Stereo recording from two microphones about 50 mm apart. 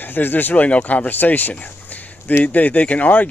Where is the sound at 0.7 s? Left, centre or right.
Left.